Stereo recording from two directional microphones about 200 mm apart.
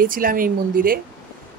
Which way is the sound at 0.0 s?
45° right (ahead or behind).